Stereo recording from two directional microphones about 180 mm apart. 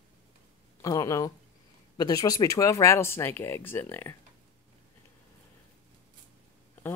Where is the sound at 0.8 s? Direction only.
20° left (ahead or behind).